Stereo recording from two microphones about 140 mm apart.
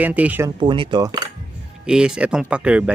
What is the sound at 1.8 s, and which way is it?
Speech, 5° right (ahead or behind).